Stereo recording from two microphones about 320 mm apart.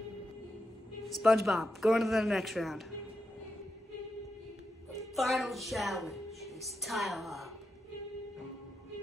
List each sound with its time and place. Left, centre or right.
1.0 s speech: centre
5.1 s a woman's voice: centre